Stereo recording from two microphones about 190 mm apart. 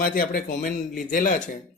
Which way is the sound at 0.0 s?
50° left (ahead or behind).